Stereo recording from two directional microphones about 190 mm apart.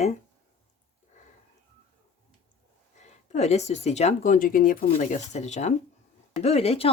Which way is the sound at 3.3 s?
35° left (ahead or behind).